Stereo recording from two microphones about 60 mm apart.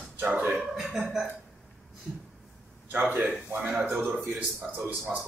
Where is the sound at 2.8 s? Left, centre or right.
Right.